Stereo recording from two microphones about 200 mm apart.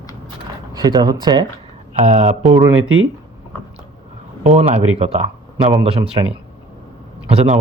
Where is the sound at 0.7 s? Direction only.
20° right (ahead or behind).